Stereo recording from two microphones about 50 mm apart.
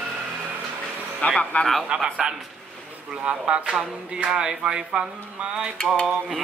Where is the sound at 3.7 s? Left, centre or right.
Centre.